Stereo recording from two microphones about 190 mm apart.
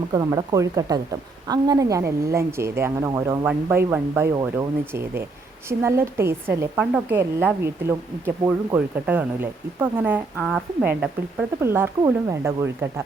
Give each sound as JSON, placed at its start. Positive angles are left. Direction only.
{"t": 0.1, "sound": "a woman's voice", "side_deg": -20}